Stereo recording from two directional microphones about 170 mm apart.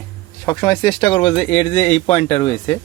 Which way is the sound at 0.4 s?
20° left (ahead or behind).